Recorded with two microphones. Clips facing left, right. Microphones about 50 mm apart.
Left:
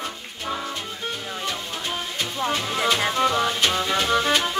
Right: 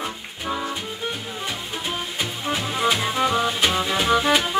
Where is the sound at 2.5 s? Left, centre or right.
Centre.